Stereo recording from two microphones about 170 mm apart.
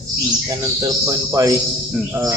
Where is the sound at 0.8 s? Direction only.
20° right (ahead or behind).